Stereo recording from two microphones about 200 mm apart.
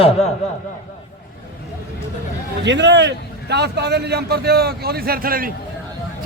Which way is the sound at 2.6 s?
60° right (ahead or behind).